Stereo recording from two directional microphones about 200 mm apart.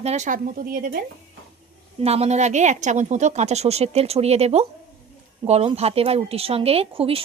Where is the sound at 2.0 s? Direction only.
30° right (ahead or behind).